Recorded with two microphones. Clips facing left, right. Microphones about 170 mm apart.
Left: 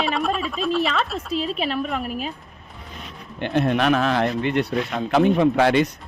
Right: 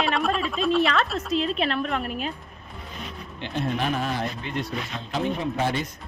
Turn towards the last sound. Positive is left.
turn(degrees=75)  # may be behind; listen again after turning